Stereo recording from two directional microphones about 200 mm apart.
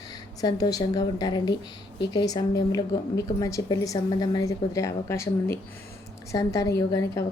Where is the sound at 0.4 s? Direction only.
20° left (ahead or behind).